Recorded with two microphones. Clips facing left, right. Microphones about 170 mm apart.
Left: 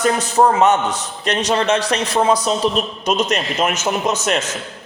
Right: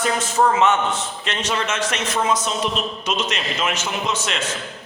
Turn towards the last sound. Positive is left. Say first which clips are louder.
# left 5 dB
turn(degrees=45)  # may be behind; listen again after turning